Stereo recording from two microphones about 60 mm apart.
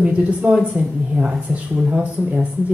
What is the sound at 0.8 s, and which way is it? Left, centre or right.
Speech, right.